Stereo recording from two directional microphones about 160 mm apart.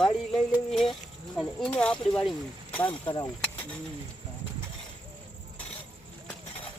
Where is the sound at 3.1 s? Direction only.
30° left (ahead or behind).